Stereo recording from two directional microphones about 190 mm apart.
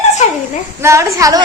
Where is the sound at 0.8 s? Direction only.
15° right (ahead or behind).